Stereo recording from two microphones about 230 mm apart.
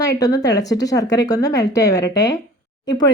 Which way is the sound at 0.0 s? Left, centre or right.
Centre.